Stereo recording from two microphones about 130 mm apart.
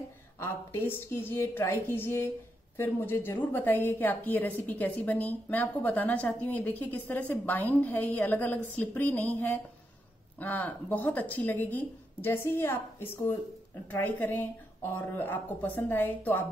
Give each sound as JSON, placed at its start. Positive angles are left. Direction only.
{"t": 0.4, "sound": "a woman's voice", "side_deg": 15}